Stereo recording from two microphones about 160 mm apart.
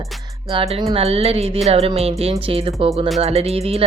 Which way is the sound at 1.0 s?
40° right (ahead or behind).